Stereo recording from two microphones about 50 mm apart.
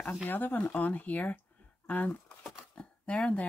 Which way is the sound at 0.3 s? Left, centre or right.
Left.